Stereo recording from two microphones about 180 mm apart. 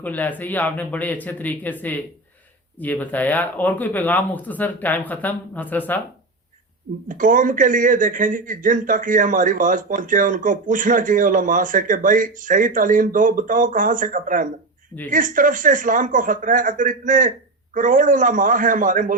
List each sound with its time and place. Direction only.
0.0 s speech: 10° left (ahead or behind)
7.1 s speech: 50° right (ahead or behind)